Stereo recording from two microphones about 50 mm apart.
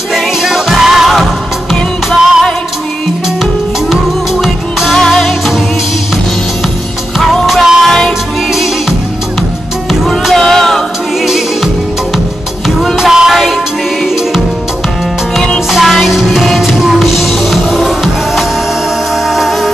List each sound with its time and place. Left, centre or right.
0.1 s music: centre
3.9 s music: centre
7.4 s music: centre
7.8 s music: centre
10.0 s music: centre
11.2 s music: centre
12.9 s music: centre
15.8 s music: centre